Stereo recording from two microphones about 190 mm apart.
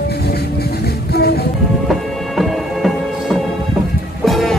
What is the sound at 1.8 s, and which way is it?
Music, centre (ahead or behind).